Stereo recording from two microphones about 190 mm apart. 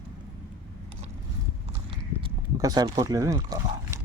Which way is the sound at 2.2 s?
20° right (ahead or behind).